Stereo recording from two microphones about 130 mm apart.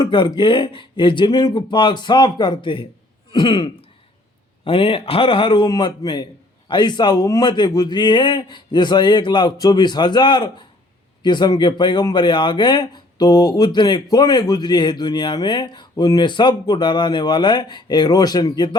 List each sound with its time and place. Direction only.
0.0 s speech: 35° left (ahead or behind)